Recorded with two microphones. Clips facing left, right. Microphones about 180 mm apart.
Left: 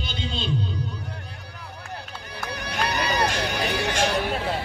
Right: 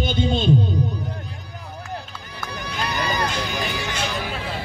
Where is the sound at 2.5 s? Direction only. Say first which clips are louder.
Left 1 dB; 70° left (ahead or behind).